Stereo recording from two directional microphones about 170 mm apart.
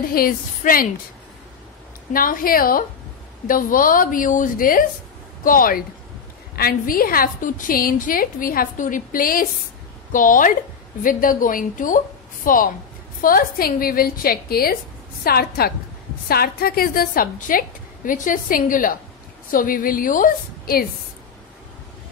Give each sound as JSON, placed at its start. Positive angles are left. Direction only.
{"t": 0.1, "sound": "a woman's voice", "side_deg": 60}
{"t": 2.1, "sound": "a woman's voice", "side_deg": 55}